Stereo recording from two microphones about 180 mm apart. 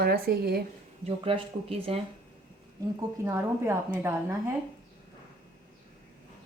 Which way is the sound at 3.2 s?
15° right (ahead or behind).